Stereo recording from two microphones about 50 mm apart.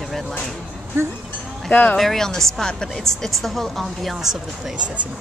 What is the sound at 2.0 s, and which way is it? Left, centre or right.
A woman's voice, centre.